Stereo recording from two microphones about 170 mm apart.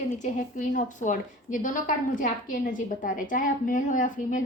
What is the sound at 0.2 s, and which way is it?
A woman's voice, 50° left (ahead or behind).